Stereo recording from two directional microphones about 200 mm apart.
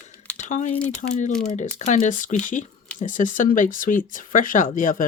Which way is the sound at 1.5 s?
35° left (ahead or behind).